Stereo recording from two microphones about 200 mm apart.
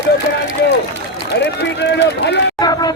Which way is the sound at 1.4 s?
60° left (ahead or behind).